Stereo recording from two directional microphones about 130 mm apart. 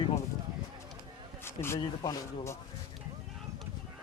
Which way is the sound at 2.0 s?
30° left (ahead or behind).